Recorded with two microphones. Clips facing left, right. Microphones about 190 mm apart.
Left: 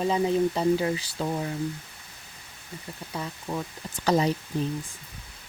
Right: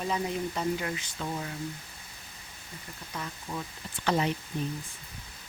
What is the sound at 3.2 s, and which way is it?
Speech, 30° left (ahead or behind).